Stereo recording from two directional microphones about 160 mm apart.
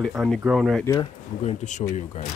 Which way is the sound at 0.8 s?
20° left (ahead or behind).